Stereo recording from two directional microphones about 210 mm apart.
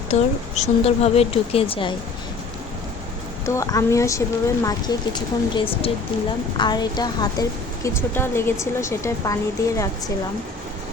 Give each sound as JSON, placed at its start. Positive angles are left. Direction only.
{"t": 0.1, "sound": "a woman's voice", "side_deg": 30}
{"t": 3.4, "sound": "a woman's voice", "side_deg": 15}